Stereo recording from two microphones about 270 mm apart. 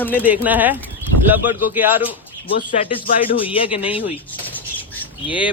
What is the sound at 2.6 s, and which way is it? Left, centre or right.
Speech, left.